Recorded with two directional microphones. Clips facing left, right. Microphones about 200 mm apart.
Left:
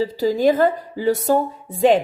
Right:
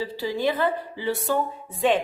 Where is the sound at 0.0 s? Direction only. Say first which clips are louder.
Left 8 dB; 45° left (ahead or behind).